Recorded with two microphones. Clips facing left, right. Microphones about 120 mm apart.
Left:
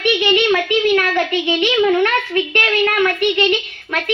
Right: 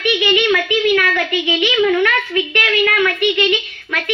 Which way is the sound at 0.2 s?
35° left (ahead or behind).